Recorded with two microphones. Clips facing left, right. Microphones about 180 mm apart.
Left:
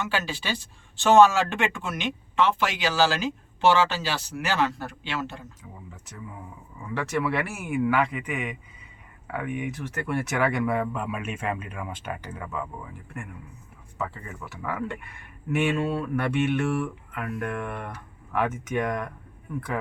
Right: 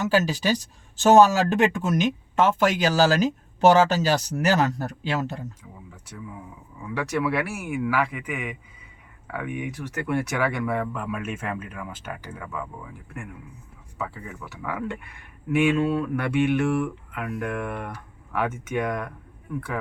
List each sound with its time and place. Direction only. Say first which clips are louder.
0.0 s speech: right 7 dB; 40° right (ahead or behind)
6.8 s speech: right 1 dB; 10° right (ahead or behind)
10.2 s speech: left 1 dB; centre (ahead or behind)
12.0 s speech: left 1 dB; 5° right (ahead or behind)
14.6 s speech: even; 5° right (ahead or behind)
16.2 s speech: right 3 dB; 10° right (ahead or behind)